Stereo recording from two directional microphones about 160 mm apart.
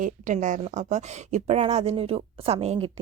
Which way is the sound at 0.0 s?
50° right (ahead or behind).